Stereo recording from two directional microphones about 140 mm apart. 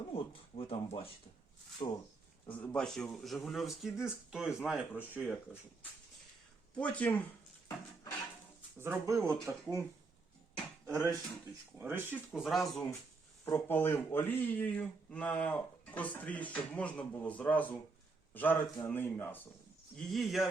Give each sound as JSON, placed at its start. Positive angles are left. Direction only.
{"t": 0.1, "sound": "speech", "side_deg": 40}
{"t": 1.8, "sound": "speech", "side_deg": 35}
{"t": 2.5, "sound": "speech", "side_deg": 10}
{"t": 6.7, "sound": "speech", "side_deg": 10}
{"t": 8.8, "sound": "speech", "side_deg": -20}
{"t": 10.8, "sound": "speech", "side_deg": -20}
{"t": 12.3, "sound": "speech", "side_deg": 0}
{"t": 13.7, "sound": "speech", "side_deg": 15}
{"t": 20.0, "sound": "speech", "side_deg": 0}